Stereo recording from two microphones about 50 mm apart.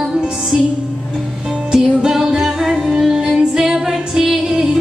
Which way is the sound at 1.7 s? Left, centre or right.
Centre.